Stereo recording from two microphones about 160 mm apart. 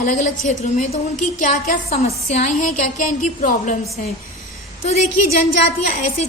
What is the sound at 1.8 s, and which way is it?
A woman's voice, 40° left (ahead or behind).